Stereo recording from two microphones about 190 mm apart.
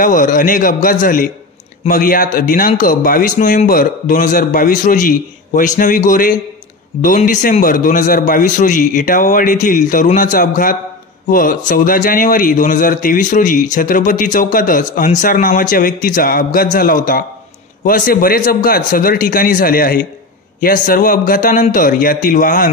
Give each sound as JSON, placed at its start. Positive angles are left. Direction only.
{"t": 0.0, "sound": "a man's voice", "side_deg": 45}